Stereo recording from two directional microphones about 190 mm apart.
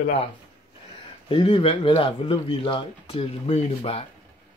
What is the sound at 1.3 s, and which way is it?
Speech, 30° left (ahead or behind).